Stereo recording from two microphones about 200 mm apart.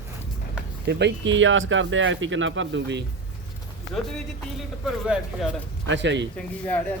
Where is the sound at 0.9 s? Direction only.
60° right (ahead or behind).